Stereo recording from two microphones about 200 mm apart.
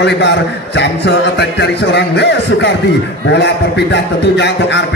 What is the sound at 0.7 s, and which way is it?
A man's voice, 60° left (ahead or behind).